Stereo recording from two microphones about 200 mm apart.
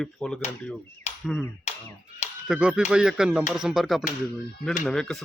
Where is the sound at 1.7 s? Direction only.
35° left (ahead or behind).